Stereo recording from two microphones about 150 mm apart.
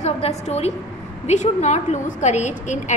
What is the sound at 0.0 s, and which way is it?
A woman's voice, 45° left (ahead or behind).